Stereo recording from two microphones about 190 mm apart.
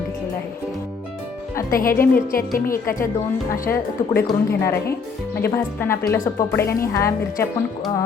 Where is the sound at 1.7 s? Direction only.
50° left (ahead or behind).